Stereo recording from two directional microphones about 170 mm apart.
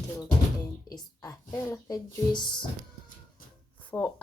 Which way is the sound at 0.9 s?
20° left (ahead or behind).